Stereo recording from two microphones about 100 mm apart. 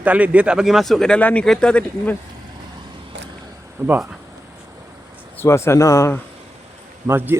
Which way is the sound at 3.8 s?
30° right (ahead or behind).